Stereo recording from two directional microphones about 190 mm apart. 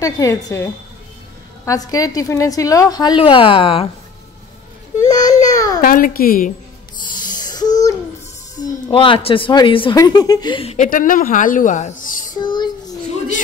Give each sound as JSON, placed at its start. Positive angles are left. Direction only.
{"t": 0.0, "sound": "a woman's voice", "side_deg": 15}
{"t": 1.7, "sound": "a woman's voice", "side_deg": 20}
{"t": 4.9, "sound": "speech", "side_deg": 20}
{"t": 5.5, "sound": "babbling", "side_deg": 20}
{"t": 5.8, "sound": "a woman's voice", "side_deg": 50}
{"t": 7.1, "sound": "a sound", "side_deg": 20}
{"t": 8.5, "sound": "a woman's voice", "side_deg": 25}
{"t": 10.9, "sound": "a woman's voice", "side_deg": 45}
{"t": 12.4, "sound": "child singing", "side_deg": 25}